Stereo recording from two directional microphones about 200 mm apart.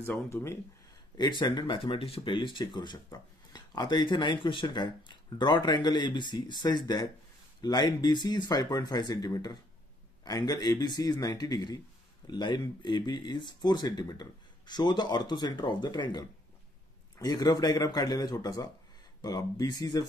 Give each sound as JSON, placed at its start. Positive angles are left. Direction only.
{"t": 0.0, "sound": "speech", "side_deg": 10}